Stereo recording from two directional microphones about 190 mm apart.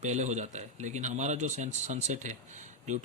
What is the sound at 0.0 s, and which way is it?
A man's voice, 35° right (ahead or behind).